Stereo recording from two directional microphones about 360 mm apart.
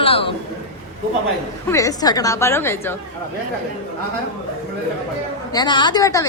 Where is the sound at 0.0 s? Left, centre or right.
Centre.